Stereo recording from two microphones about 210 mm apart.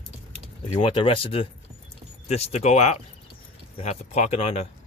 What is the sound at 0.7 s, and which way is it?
Speech, 25° left (ahead or behind).